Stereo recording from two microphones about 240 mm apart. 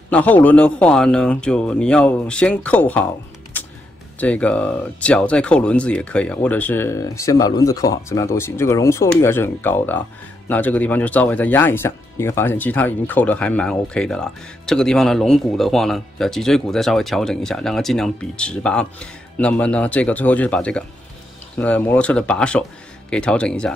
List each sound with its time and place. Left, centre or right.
0.1 s speech: centre
4.2 s speech: centre